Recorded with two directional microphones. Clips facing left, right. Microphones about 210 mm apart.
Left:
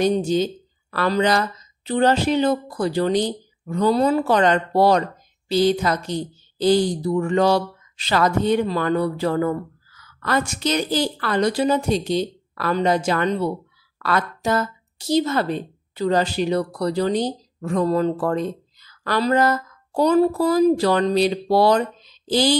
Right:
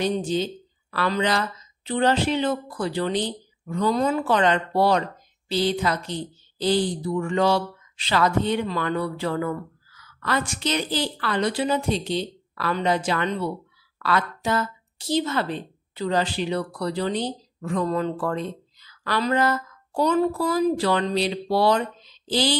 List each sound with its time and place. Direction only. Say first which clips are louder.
0.0 s a woman's voice: left 5 dB; 45° left (ahead or behind)